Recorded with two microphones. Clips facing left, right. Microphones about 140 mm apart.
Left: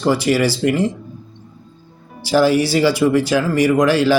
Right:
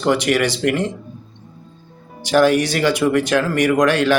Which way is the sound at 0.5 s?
65° right (ahead or behind).